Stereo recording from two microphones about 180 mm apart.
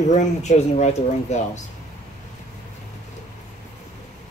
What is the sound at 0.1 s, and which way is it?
Speech, 40° left (ahead or behind).